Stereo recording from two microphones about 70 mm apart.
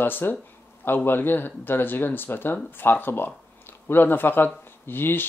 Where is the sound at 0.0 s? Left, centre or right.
Left.